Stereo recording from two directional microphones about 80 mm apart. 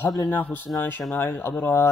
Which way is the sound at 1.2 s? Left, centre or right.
Left.